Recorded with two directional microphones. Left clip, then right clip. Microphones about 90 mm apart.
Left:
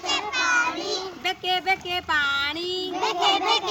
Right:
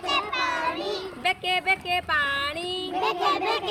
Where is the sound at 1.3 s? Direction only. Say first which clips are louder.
Even; 35° left (ahead or behind).